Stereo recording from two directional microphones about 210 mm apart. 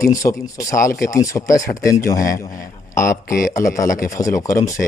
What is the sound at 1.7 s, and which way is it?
Speech, 45° left (ahead or behind).